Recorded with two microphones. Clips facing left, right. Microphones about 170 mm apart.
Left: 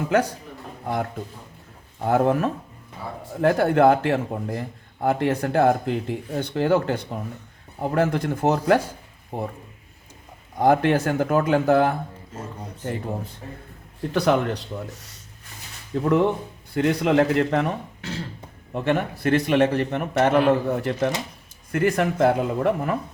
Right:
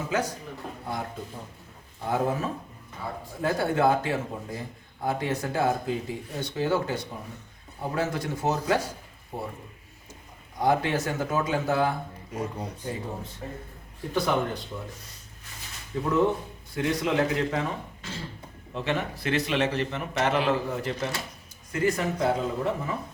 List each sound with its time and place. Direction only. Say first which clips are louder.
2.0 s speech: left 7 dB; 60° left (ahead or behind)
10.6 s speech: left 6 dB; 55° left (ahead or behind)
12.3 s speech: right 8 dB; 10° right (ahead or behind)
14.1 s speech: left 5 dB; 75° left (ahead or behind)
15.9 s speech: left 4 dB; 70° left (ahead or behind)
18.7 s a man's voice: left 6 dB; 55° left (ahead or behind)